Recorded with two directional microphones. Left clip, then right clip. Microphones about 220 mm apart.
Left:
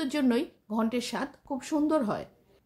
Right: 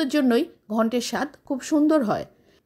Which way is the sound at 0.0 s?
30° right (ahead or behind).